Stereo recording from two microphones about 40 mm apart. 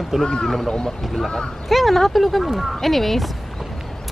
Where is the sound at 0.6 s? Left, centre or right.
Centre.